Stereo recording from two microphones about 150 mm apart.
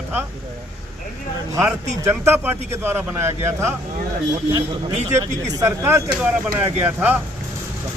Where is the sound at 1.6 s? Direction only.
15° right (ahead or behind).